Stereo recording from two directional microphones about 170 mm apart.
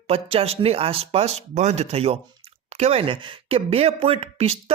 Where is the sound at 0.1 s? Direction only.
35° right (ahead or behind).